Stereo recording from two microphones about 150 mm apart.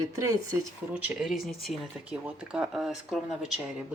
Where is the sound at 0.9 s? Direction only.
Centre (ahead or behind).